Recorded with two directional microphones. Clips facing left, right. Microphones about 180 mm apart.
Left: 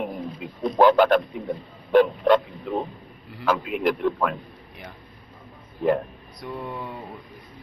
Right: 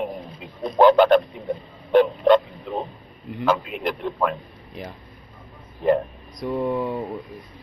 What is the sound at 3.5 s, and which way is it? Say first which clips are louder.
Speech: even; 5° left (ahead or behind).